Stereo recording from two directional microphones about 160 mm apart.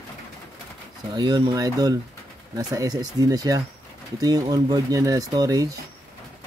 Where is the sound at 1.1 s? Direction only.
25° right (ahead or behind).